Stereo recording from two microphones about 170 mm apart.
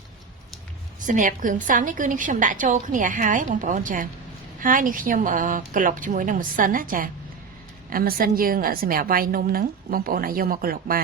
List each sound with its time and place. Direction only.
1.0 s a woman's voice: 50° right (ahead or behind)